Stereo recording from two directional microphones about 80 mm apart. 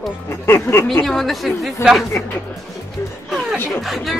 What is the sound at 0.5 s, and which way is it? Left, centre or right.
Speech, left.